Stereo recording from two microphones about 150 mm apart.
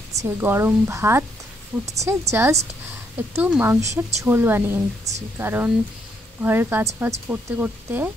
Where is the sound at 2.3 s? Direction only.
15° right (ahead or behind).